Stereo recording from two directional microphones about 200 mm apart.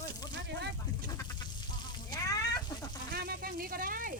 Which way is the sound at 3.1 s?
50° right (ahead or behind).